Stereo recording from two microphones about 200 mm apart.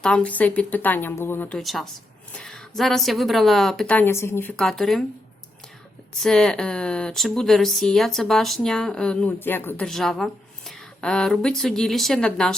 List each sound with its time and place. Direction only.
0.0 s speech: 5° left (ahead or behind)
6.2 s speech: 5° left (ahead or behind)